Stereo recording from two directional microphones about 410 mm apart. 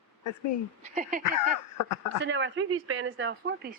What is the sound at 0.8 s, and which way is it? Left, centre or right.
Speech, centre.